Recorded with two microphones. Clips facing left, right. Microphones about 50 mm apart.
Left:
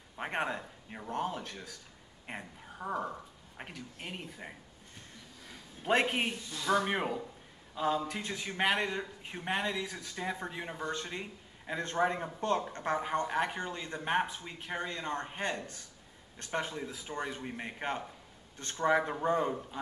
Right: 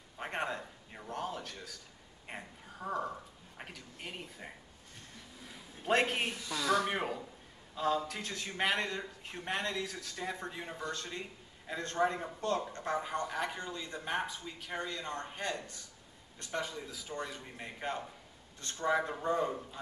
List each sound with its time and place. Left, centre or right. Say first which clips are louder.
0.2 s speech: left 2 dB; centre
5.5 s a sound: left 1 dB; centre
6.7 s speech: left 2 dB; centre